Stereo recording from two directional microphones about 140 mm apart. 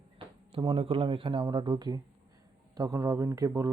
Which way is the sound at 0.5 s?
40° right (ahead or behind).